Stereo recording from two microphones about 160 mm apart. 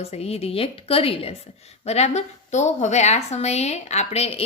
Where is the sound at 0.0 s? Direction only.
40° left (ahead or behind).